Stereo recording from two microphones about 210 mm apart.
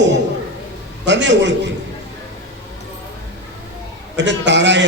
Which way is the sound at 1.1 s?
60° right (ahead or behind).